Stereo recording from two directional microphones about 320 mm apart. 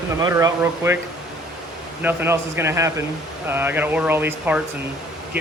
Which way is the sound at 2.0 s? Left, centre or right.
Centre.